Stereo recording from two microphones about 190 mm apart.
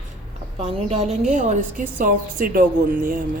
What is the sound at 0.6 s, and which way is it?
A woman's voice, 35° right (ahead or behind).